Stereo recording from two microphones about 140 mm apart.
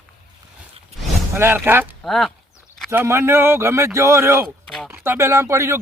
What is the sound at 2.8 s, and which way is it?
Speech, 20° right (ahead or behind).